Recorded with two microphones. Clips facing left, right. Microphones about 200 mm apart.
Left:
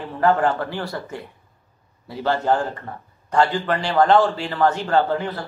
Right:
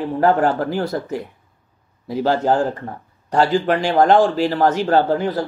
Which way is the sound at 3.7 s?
50° right (ahead or behind).